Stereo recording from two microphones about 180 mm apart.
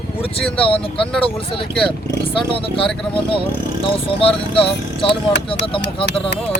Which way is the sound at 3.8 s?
30° left (ahead or behind).